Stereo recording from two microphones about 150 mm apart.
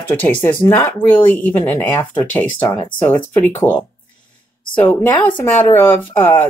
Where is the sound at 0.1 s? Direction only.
15° left (ahead or behind).